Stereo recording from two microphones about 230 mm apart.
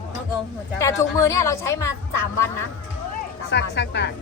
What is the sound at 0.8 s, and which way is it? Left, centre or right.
Speech, centre.